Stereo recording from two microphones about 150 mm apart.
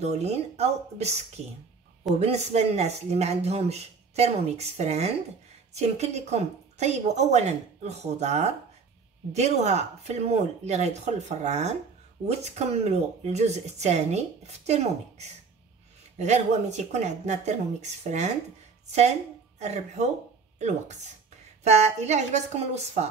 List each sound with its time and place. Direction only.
0.0 s speech: 45° right (ahead or behind)
2.1 s speech: 45° right (ahead or behind)